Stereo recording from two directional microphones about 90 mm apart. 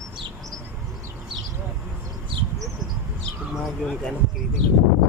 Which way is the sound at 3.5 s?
5° left (ahead or behind).